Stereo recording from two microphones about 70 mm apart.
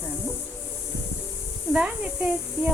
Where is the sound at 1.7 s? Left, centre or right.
Centre.